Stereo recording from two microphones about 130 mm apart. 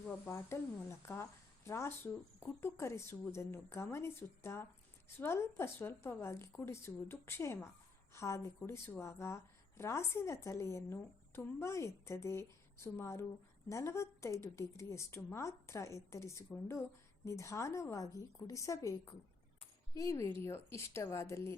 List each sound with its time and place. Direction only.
0.0 s a woman's voice: 20° left (ahead or behind)